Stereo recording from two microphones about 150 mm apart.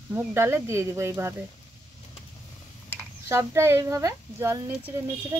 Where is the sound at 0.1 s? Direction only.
15° right (ahead or behind).